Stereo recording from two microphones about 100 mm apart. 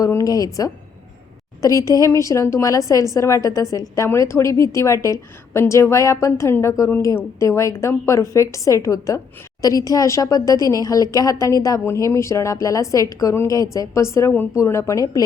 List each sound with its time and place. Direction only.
0.0 s a woman's voice: 35° left (ahead or behind)